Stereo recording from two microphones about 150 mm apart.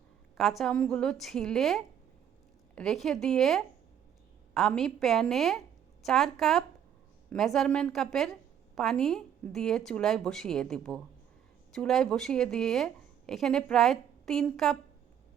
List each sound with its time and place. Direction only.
0.3 s a woman's voice: centre (ahead or behind)